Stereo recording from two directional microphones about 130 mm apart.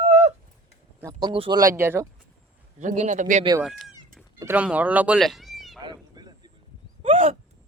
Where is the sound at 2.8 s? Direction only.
70° right (ahead or behind).